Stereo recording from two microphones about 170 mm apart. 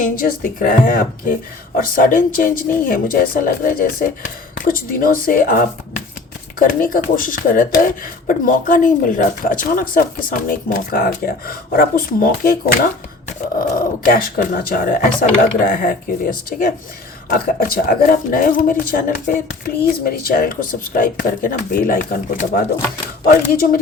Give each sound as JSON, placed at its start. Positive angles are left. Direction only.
{"t": 0.0, "sound": "speech", "side_deg": 55}
{"t": 14.1, "sound": "speech", "side_deg": 60}